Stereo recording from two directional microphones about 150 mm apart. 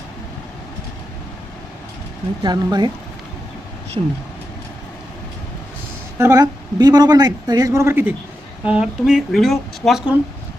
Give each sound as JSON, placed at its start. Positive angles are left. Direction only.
{"t": 2.4, "sound": "speech", "side_deg": -30}
{"t": 4.0, "sound": "speech", "side_deg": -35}
{"t": 6.1, "sound": "speech", "side_deg": -15}
{"t": 6.4, "sound": "speech", "side_deg": -25}